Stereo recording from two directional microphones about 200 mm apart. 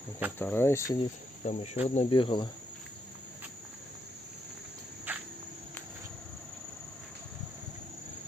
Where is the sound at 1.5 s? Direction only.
35° left (ahead or behind).